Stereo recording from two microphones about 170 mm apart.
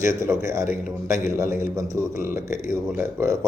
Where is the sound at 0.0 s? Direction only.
15° right (ahead or behind).